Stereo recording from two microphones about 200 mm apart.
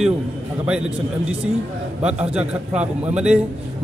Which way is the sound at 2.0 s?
5° right (ahead or behind).